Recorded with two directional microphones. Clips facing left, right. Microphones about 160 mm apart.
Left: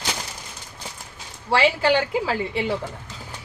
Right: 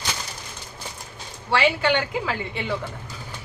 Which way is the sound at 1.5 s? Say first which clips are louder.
Left 2 dB; 30° left (ahead or behind).